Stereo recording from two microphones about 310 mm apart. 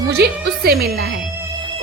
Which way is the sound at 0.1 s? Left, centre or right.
Right.